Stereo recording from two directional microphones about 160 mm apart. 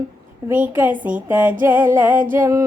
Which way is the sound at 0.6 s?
10° right (ahead or behind).